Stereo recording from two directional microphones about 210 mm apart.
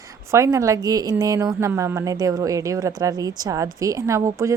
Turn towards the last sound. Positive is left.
turn(degrees=-15)  # may be behind; listen again after turning